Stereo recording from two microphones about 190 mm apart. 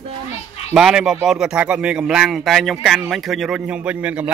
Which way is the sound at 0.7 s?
5° right (ahead or behind).